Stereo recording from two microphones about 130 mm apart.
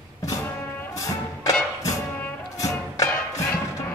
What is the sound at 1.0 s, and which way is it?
Music, 25° left (ahead or behind).